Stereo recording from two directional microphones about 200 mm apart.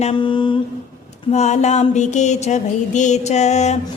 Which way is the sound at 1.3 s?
35° left (ahead or behind).